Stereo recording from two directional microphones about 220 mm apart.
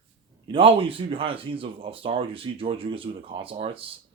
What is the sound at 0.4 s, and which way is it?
Speech, 25° right (ahead or behind).